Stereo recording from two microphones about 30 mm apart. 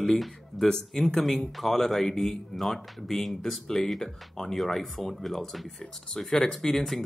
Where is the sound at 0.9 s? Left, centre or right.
Centre.